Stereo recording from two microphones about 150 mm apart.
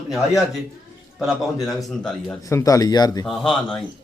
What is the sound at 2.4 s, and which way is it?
Speech, 20° left (ahead or behind).